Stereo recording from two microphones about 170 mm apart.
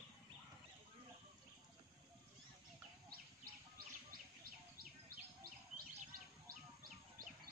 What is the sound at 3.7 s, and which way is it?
Bird, 60° right (ahead or behind).